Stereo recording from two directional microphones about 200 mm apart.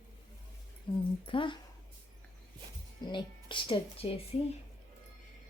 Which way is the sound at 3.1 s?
25° left (ahead or behind).